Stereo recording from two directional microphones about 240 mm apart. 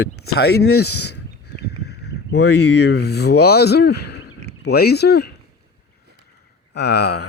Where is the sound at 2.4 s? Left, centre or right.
Left.